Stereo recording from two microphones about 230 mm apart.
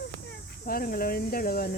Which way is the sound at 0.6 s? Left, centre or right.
Left.